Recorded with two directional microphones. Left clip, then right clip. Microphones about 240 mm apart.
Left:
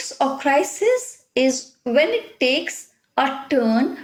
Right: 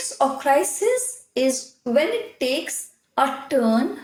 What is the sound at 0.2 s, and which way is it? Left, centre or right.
A woman's voice, left.